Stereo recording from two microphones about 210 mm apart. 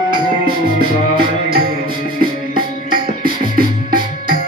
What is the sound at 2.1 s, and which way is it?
Music, 45° right (ahead or behind).